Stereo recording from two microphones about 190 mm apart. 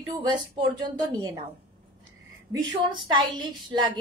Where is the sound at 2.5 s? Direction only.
20° right (ahead or behind).